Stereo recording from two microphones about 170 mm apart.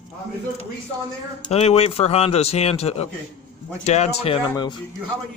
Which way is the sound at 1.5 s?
40° left (ahead or behind).